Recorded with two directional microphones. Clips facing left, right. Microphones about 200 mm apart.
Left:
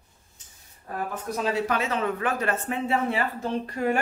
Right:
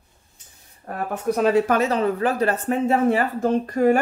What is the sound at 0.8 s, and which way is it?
Speech, 60° right (ahead or behind).